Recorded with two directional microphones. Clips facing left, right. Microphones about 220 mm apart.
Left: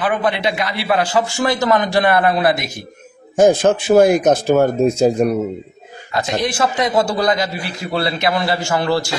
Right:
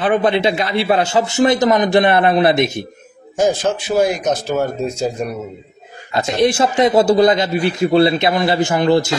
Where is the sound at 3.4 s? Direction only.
55° left (ahead or behind).